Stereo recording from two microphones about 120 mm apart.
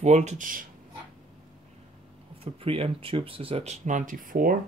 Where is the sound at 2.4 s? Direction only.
50° right (ahead or behind); by 4.1 s 90° right.